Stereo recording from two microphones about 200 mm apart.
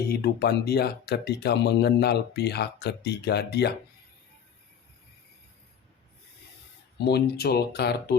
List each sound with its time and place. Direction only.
0.1 s speech: 50° left (ahead or behind)
7.0 s speech: 50° left (ahead or behind)